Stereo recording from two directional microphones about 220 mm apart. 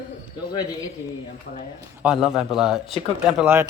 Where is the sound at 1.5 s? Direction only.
45° left (ahead or behind).